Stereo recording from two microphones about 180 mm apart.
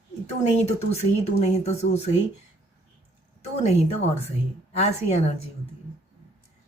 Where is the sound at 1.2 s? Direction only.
35° left (ahead or behind).